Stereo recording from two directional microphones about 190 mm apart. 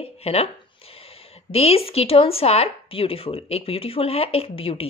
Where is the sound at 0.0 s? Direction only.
30° left (ahead or behind).